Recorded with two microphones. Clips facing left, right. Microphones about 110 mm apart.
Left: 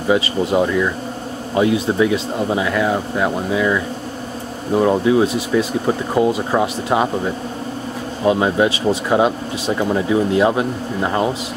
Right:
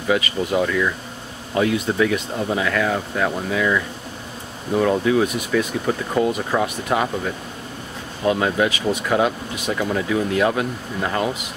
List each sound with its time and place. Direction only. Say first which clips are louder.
0.1 s speech: left 4 dB; 25° left (ahead or behind)